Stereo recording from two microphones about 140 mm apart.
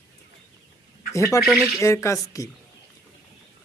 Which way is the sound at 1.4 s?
Centre (ahead or behind).